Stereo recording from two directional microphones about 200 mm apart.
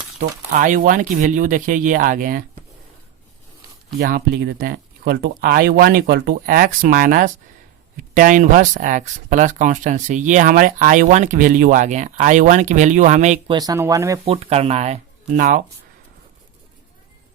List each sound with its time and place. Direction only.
0.5 s speech: 40° right (ahead or behind)
4.0 s speech: 55° right (ahead or behind); by 13.4 s 35° right (ahead or behind)
13.5 s speech: 20° right (ahead or behind)
14.3 s speech: 30° right (ahead or behind)
15.4 s speech: 40° right (ahead or behind)